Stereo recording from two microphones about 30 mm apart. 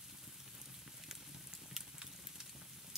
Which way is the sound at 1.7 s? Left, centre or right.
Centre.